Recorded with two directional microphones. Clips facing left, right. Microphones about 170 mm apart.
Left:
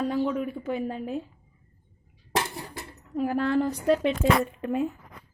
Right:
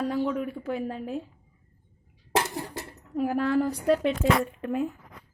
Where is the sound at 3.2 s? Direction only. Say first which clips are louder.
Even; 5° right (ahead or behind).